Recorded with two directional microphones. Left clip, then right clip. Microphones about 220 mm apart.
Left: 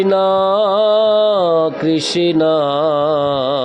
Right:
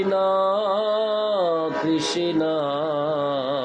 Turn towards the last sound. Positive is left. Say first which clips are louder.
# left 8 dB
turn(degrees=45)  # may be behind; listen again after turning